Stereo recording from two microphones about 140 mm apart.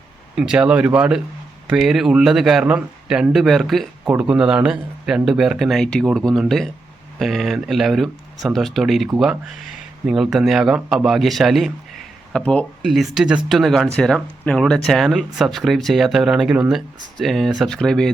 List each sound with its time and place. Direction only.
0.3 s speech: 5° right (ahead or behind)